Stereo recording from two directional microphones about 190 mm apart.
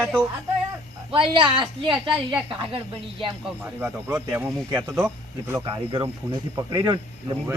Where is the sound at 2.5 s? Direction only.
25° right (ahead or behind).